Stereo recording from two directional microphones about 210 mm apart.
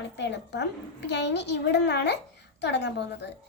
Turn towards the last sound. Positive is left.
turn(degrees=55)  # may be behind; listen again after turning